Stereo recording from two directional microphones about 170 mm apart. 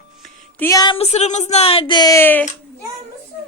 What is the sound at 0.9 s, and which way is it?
Speech, 40° left (ahead or behind).